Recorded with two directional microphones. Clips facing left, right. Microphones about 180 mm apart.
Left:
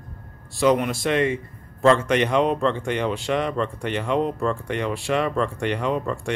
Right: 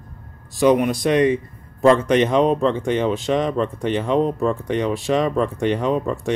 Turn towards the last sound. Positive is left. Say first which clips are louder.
# right 4 dB
turn(degrees=-20)  # may be behind; listen again after turning